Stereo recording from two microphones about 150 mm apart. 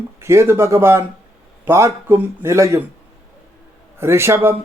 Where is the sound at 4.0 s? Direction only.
15° right (ahead or behind).